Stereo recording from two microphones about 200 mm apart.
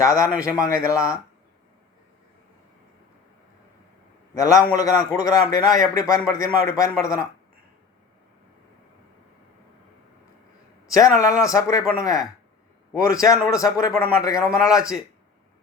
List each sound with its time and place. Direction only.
0.0 s a man's voice: 15° left (ahead or behind)
4.4 s a man's voice: 15° left (ahead or behind)
10.9 s a man's voice: 15° left (ahead or behind)